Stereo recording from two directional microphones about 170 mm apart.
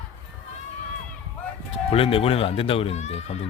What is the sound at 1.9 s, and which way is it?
Speech, 35° left (ahead or behind).